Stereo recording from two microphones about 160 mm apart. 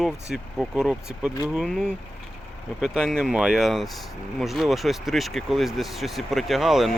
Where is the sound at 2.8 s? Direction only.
Centre (ahead or behind).